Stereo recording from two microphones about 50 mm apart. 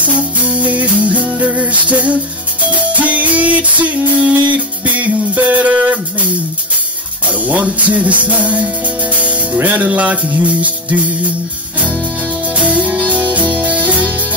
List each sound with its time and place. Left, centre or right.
0.0 s music: right
7.2 s music: right
12.5 s music: right